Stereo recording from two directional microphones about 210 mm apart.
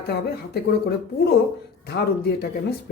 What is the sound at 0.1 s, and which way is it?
Speech, 50° left (ahead or behind).